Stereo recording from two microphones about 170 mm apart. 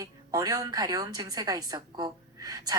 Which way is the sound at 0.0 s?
20° right (ahead or behind).